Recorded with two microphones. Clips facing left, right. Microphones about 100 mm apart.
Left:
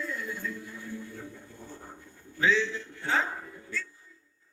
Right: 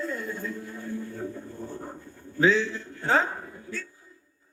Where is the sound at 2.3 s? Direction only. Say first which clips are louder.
Right 4 dB; 40° right (ahead or behind).